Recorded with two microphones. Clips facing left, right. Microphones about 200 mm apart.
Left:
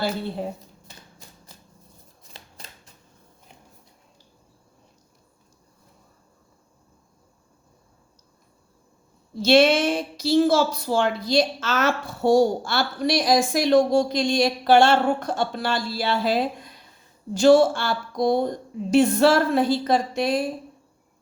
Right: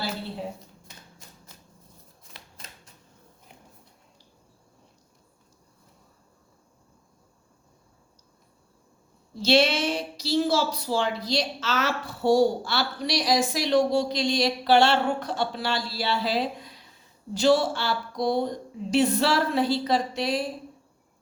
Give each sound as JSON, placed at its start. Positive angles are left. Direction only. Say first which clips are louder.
{"t": 2.3, "sound": "shuffling cards", "louder": "left 3 dB", "side_deg": 30}
{"t": 9.4, "sound": "a woman's voice", "louder": "left 5 dB", "side_deg": 55}